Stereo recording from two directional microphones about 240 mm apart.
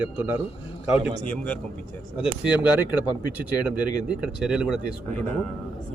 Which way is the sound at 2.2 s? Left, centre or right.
Centre.